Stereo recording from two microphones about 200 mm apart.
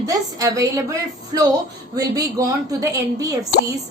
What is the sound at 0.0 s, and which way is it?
A woman's voice, 15° right (ahead or behind).